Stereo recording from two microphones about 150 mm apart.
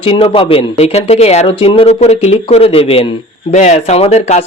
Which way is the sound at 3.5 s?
50° left (ahead or behind).